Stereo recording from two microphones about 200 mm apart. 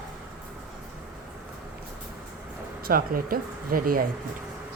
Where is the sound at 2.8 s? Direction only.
45° right (ahead or behind).